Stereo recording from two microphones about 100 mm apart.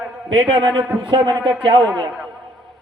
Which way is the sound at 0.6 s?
50° right (ahead or behind).